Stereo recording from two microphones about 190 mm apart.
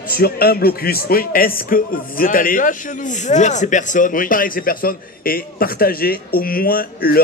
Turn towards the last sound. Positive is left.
turn(degrees=50)  # may be behind; listen again after turning